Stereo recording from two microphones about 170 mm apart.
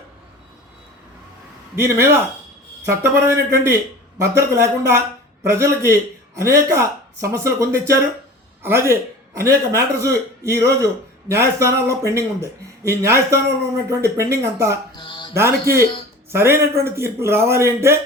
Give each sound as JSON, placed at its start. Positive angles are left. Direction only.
{"t": 1.7, "sound": "speech", "side_deg": -15}
{"t": 14.9, "sound": "music", "side_deg": 30}
{"t": 15.3, "sound": "speech", "side_deg": -15}